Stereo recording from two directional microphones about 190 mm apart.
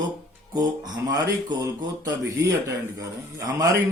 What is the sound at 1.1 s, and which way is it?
Speech, 20° right (ahead or behind).